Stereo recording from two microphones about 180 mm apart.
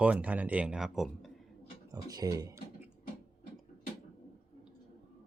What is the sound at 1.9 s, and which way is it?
Speech, 20° right (ahead or behind).